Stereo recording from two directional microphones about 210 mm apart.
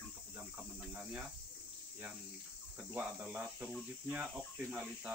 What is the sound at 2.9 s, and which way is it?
Speech, 5° right (ahead or behind).